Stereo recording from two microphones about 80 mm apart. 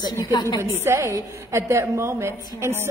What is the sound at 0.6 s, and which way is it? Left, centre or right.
A woman's voice, right.